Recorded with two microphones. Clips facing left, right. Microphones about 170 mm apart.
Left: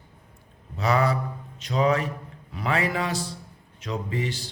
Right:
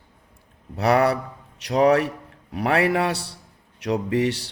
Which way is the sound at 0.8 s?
65° right (ahead or behind).